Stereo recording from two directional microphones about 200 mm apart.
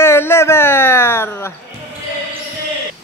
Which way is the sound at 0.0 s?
10° left (ahead or behind).